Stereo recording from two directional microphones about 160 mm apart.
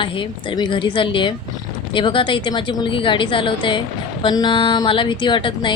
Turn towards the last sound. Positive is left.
turn(degrees=30)  # may be behind; listen again after turning